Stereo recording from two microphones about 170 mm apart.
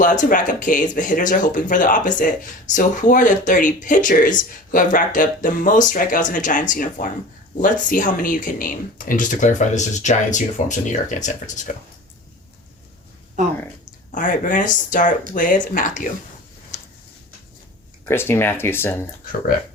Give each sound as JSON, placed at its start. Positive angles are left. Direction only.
{"t": 0.0, "sound": "speech", "side_deg": 50}
{"t": 13.4, "sound": "speech", "side_deg": -45}
{"t": 14.1, "sound": "speech", "side_deg": 50}
{"t": 16.7, "sound": "tick-tock", "side_deg": 45}
{"t": 18.1, "sound": "speech", "side_deg": 15}